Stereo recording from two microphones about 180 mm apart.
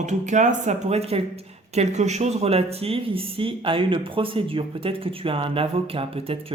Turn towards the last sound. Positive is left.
turn(degrees=-30)  # may be behind; listen again after turning